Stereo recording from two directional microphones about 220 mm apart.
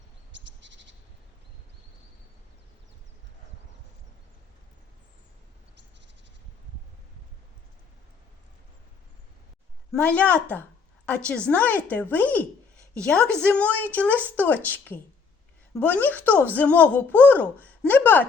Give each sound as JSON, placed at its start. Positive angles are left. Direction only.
{"t": 0.3, "sound": "bird", "side_deg": -55}
{"t": 9.9, "sound": "a woman's voice", "side_deg": 5}